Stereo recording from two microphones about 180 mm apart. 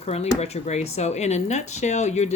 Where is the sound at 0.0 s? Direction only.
35° left (ahead or behind).